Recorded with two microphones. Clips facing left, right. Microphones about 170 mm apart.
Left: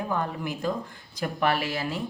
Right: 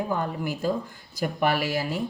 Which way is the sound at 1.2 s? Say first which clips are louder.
Right 1 dB; 10° right (ahead or behind).